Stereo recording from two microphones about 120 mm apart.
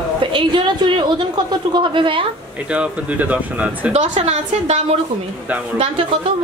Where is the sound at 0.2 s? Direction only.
40° right (ahead or behind).